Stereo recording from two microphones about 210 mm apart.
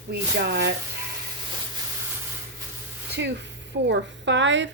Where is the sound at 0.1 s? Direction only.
50° right (ahead or behind).